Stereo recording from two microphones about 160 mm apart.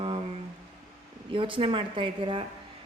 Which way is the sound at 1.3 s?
35° right (ahead or behind).